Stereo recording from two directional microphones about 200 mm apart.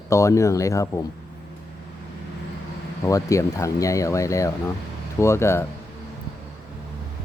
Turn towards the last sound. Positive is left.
turn(degrees=15)  # may be behind; listen again after turning